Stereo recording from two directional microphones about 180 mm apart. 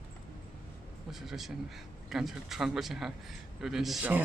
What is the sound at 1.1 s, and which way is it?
A man's voice, centre (ahead or behind).